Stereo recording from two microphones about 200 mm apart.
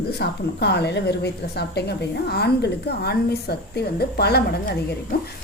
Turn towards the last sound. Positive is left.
turn(degrees=50)  # may be behind; listen again after turning